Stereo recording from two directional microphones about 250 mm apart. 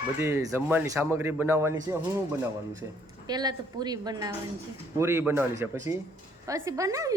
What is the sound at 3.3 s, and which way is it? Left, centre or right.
A woman's voice, centre.